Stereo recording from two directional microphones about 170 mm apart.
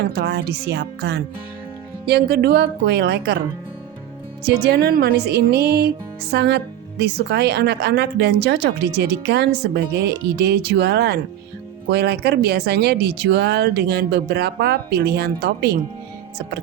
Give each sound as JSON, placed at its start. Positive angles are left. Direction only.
{"t": 0.1, "sound": "speech", "side_deg": -70}
{"t": 4.4, "sound": "speech", "side_deg": -70}